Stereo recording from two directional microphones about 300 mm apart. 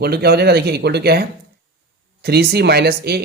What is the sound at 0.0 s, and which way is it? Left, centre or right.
Speech, right.